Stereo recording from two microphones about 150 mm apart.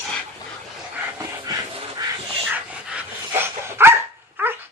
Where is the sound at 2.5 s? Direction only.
10° right (ahead or behind).